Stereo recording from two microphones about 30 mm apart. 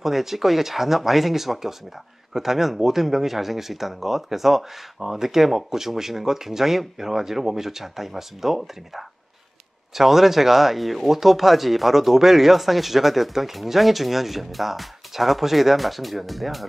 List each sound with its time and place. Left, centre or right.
0.0 s speech: centre